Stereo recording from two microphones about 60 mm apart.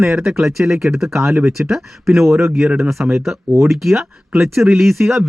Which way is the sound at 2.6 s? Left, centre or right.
Centre.